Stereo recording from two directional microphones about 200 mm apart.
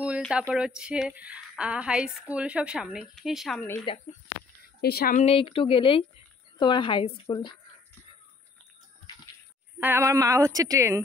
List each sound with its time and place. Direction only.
0.0 s speech: 5° right (ahead or behind)
3.9 s speech: 25° left (ahead or behind)
4.8 s a woman's voice: 50° left (ahead or behind)
5.2 s speech: 25° left (ahead or behind)
9.8 s a woman's voice: 10° right (ahead or behind)